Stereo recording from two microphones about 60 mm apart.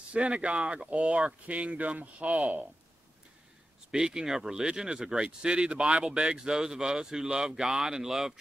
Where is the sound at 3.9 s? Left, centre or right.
Centre.